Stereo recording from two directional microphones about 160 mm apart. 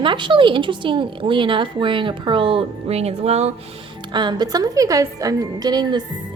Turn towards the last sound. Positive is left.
turn(degrees=-25)  # may be behind; listen again after turning